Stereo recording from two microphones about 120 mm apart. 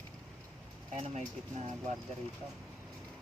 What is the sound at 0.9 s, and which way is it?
Speech, 60° right (ahead or behind).